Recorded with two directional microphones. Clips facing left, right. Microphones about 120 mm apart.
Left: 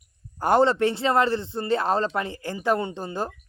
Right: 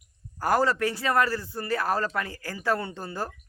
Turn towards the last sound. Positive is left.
turn(degrees=20)  # may be behind; listen again after turning